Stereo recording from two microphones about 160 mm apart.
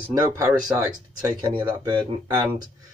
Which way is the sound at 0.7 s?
15° right (ahead or behind).